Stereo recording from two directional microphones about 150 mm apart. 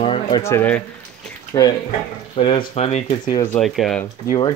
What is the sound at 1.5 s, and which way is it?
Speech, 25° left (ahead or behind).